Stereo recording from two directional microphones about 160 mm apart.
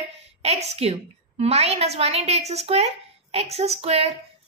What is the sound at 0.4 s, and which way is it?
A woman's voice, 40° right (ahead or behind).